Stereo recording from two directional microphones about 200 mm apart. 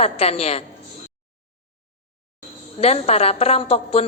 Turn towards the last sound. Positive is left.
turn(degrees=30)  # may be behind; listen again after turning